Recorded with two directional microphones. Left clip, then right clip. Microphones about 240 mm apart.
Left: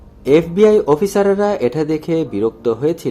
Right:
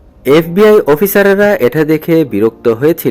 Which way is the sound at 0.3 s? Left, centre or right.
Right.